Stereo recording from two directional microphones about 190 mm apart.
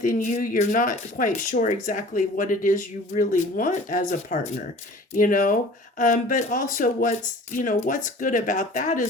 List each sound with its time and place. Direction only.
0.0 s speech: 45° left (ahead or behind)